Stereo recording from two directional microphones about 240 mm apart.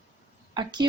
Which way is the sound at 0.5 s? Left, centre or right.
Centre.